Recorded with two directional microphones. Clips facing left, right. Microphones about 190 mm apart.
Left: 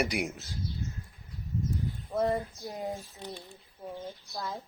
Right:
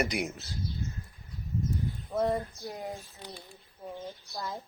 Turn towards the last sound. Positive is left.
turn(degrees=0)  # may be behind; listen again after turning